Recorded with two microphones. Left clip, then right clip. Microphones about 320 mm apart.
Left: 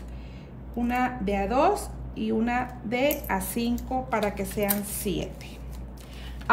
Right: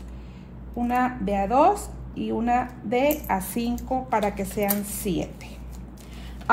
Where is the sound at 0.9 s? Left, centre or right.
Centre.